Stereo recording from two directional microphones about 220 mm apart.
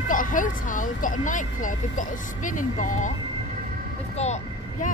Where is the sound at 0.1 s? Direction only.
35° left (ahead or behind).